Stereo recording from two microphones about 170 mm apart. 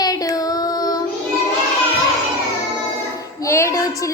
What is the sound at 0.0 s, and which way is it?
Child singing, 20° left (ahead or behind).